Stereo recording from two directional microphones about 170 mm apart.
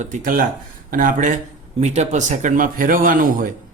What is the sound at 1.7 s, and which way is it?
Speech, 40° right (ahead or behind).